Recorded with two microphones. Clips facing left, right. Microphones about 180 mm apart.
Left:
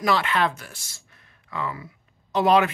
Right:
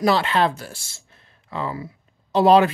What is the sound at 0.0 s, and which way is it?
Speech, 30° right (ahead or behind).